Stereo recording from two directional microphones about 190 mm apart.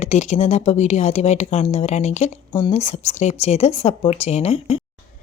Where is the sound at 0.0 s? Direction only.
35° left (ahead or behind).